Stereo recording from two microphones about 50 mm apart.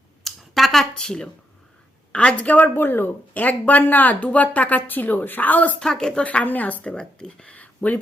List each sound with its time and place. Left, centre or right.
0.3 s a sound: centre
2.1 s speech: left
2.7 s speech: left
5.8 s speech: centre
6.2 s speech: left
6.8 s speech: centre
7.5 s a sound: left